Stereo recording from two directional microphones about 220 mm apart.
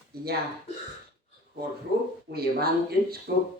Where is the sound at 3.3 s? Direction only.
50° right (ahead or behind).